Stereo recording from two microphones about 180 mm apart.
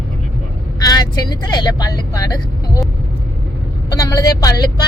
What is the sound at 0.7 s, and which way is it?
Speech, 20° left (ahead or behind).